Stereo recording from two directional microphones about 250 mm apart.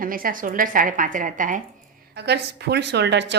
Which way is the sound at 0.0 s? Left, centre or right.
Right.